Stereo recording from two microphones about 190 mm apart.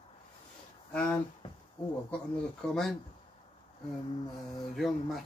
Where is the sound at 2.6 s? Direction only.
Centre (ahead or behind).